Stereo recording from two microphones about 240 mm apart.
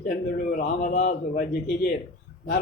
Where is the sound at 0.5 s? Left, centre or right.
Left.